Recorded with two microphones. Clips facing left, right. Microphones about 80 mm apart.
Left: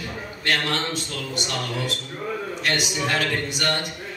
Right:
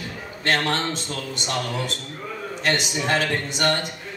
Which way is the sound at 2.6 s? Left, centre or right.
Right.